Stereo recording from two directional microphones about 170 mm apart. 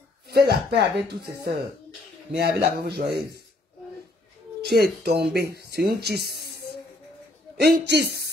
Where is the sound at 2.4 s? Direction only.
70° right (ahead or behind).